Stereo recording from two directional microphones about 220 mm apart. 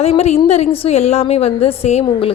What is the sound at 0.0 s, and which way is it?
A woman's voice, 30° left (ahead or behind).